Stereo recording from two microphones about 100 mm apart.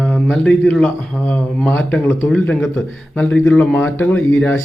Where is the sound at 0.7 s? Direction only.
5° left (ahead or behind).